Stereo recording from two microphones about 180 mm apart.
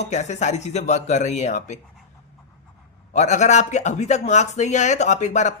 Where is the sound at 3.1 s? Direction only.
40° left (ahead or behind).